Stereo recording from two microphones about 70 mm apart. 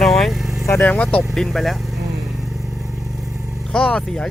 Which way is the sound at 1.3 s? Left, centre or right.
Centre.